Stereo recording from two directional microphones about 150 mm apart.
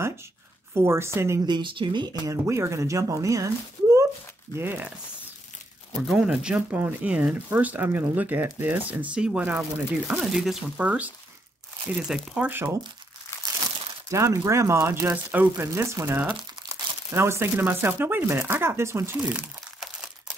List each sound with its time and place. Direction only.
0.7 s speech: 15° right (ahead or behind)
1.4 s speech: 30° right (ahead or behind); by 4.9 s 15° right (ahead or behind)
5.9 s speech: 5° right (ahead or behind)
12.4 s speech: 10° right (ahead or behind)
14.1 s speech: 20° right (ahead or behind)